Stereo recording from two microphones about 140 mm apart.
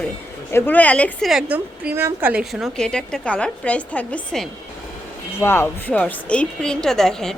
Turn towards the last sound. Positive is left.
turn(degrees=5)  # may be behind; listen again after turning